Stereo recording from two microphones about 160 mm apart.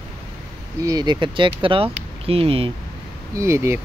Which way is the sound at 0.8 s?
25° right (ahead or behind).